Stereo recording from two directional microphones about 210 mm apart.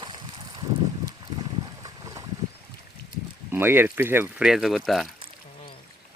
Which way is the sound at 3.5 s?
10° right (ahead or behind).